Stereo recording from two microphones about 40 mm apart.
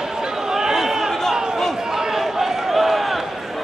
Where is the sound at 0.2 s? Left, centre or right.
Centre.